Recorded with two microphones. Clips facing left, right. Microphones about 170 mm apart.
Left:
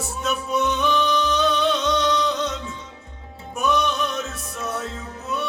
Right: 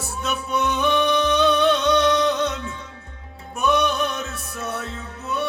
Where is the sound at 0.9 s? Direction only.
60° right (ahead or behind).